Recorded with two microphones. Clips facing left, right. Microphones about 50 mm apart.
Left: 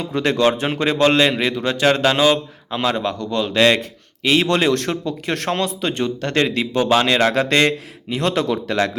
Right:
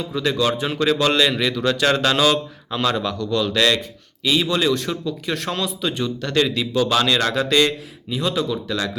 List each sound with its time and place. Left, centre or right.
0.0 s a man's voice: left
3.8 s a man's voice: left
7.3 s a man's voice: left
8.1 s a man's voice: left
8.6 s a man's voice: left